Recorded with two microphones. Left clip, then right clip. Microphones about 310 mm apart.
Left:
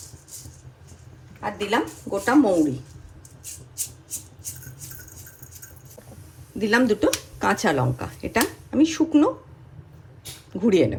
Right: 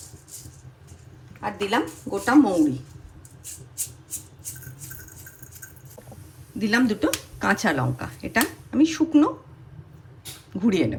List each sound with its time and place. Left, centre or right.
1.4 s speech: centre
6.6 s speech: centre
10.6 s speech: centre